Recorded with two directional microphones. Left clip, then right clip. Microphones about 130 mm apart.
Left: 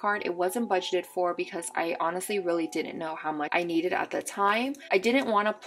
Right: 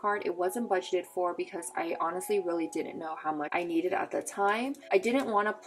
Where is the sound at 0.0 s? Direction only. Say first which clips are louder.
Left 2 dB; 25° left (ahead or behind).